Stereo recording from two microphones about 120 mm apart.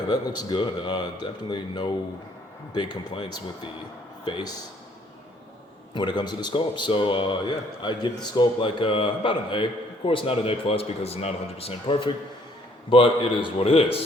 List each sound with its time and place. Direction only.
0.1 s speech: 35° left (ahead or behind)
4.3 s speech: 40° left (ahead or behind)
5.9 s speech: 40° left (ahead or behind)